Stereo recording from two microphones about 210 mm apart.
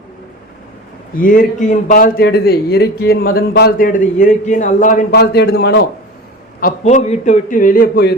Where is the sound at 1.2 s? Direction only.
40° left (ahead or behind).